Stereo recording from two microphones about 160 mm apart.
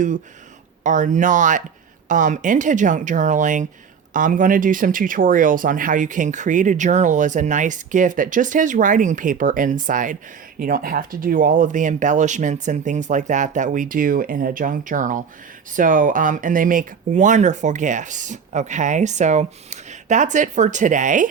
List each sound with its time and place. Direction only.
0.9 s speech: 50° right (ahead or behind)